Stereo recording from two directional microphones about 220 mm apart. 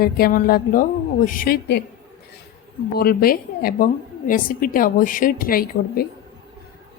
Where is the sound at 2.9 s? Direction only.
45° left (ahead or behind).